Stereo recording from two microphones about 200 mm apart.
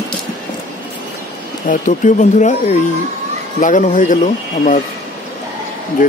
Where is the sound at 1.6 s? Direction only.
40° left (ahead or behind).